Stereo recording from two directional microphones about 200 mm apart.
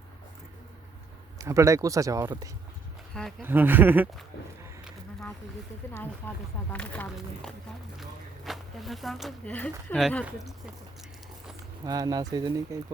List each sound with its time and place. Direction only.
1.4 s speech: 15° right (ahead or behind)
5.9 s speech: 10° left (ahead or behind)
11.9 s speech: 20° right (ahead or behind)